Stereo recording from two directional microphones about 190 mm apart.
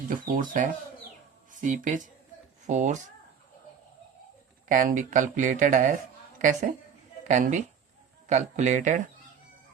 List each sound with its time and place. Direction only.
0.1 s speech: 45° right (ahead or behind)
4.7 s a woman's voice: 45° right (ahead or behind)